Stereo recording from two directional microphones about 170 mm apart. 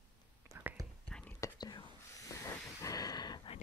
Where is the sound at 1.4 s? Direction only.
25° left (ahead or behind).